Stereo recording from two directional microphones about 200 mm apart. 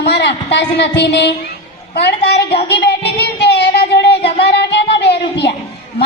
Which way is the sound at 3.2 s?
55° left (ahead or behind).